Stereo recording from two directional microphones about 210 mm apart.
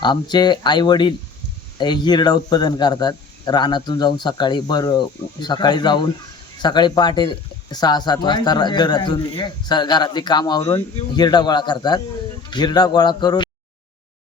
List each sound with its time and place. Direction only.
0.0 s speech: 20° left (ahead or behind)